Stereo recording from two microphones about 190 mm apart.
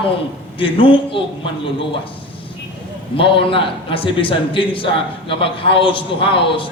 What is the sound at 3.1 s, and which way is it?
A man's voice, 30° left (ahead or behind).